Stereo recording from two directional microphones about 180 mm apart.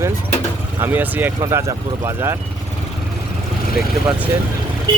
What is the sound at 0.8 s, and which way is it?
Speech, 10° right (ahead or behind).